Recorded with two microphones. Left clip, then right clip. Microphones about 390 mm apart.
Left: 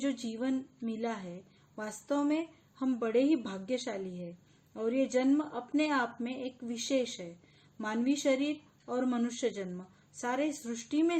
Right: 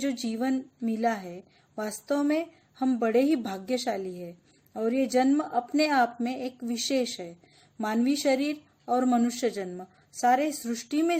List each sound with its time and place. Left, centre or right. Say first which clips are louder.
0.0 s a woman's voice: right 5 dB; right